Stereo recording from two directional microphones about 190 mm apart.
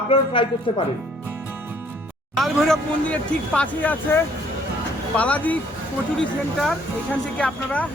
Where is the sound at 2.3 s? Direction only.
Centre (ahead or behind).